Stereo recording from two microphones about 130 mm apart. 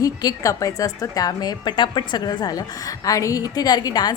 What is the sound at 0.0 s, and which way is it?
A woman's voice, 30° left (ahead or behind).